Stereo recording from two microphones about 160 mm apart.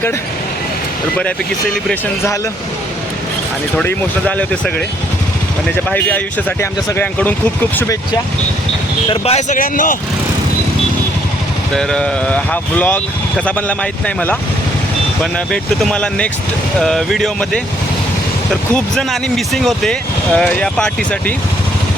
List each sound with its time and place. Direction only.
3.8 s speech: 10° left (ahead or behind)
5.9 s speech: 10° left (ahead or behind)
9.0 s speech: 40° left (ahead or behind)
9.6 s speech: 55° left (ahead or behind)
11.7 s speech: 5° left (ahead or behind)
15.2 s speech: 5° left (ahead or behind)
18.7 s speech: 5° left (ahead or behind)